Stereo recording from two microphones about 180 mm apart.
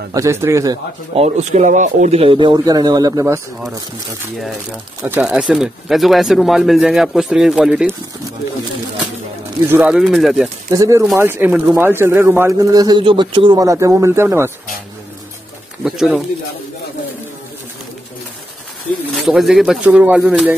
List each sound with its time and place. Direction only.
0.1 s speech: 15° right (ahead or behind)
1.1 s speech: 40° right (ahead or behind); by 3.3 s 20° right (ahead or behind)
5.0 s speech: 10° right (ahead or behind)
9.7 s speech: 5° right (ahead or behind)
10.7 s speech: 15° right (ahead or behind)
15.8 s speech: centre (ahead or behind)
19.2 s speech: centre (ahead or behind)